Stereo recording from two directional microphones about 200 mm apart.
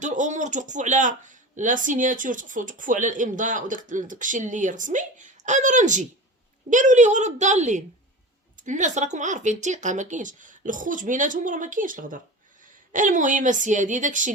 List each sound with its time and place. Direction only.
0.0 s speech: 40° right (ahead or behind)